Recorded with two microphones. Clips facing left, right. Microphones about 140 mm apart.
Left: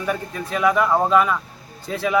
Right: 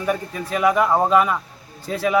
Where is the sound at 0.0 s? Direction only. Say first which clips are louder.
Right 2 dB; 10° right (ahead or behind).